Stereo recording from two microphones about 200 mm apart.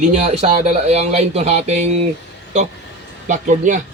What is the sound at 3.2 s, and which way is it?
Speech, 40° right (ahead or behind).